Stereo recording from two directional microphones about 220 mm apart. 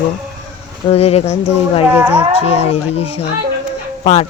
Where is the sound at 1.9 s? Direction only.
5° right (ahead or behind).